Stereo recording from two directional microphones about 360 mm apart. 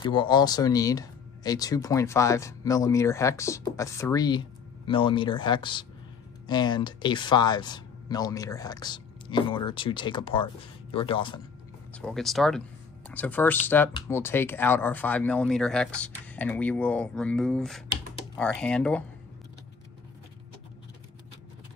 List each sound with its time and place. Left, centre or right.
0.0 s speech: centre
11.9 s speech: centre